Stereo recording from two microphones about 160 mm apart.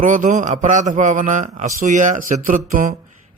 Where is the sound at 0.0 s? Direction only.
55° right (ahead or behind).